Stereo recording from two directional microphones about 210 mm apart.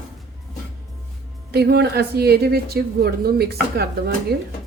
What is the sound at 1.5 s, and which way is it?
Speech, 50° right (ahead or behind).